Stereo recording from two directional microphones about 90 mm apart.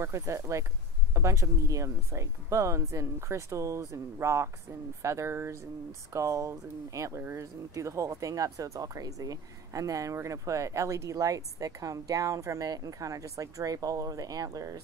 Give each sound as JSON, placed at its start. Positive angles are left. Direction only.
{"t": 0.0, "sound": "speech", "side_deg": -35}